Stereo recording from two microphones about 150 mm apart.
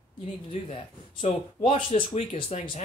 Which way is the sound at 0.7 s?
45° left (ahead or behind).